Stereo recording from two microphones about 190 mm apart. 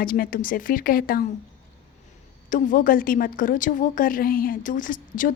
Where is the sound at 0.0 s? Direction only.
50° left (ahead or behind).